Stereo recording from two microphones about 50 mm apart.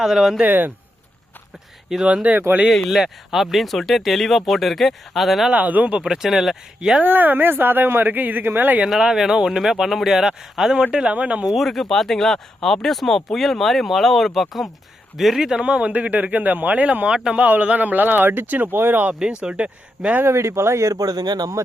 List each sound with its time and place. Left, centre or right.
0.0 s speech: centre
0.4 s speech: right
1.9 s speech: centre
2.3 s speech: right
2.6 s speech: centre
5.5 s speech: right
6.2 s speech: centre
7.0 s speech: right
9.0 s speech: centre
10.9 s speech: right
11.5 s speech: centre; by 18.7 s right
18.7 s speech: right
19.2 s speech: right
20.2 s speech: right